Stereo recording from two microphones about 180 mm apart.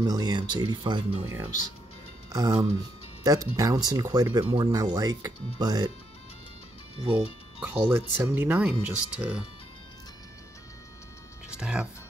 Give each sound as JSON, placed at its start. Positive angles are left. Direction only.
{"t": 0.0, "sound": "speech", "side_deg": -25}
{"t": 1.2, "sound": "speech", "side_deg": -10}
{"t": 7.6, "sound": "speech", "side_deg": -10}
{"t": 11.4, "sound": "music", "side_deg": -5}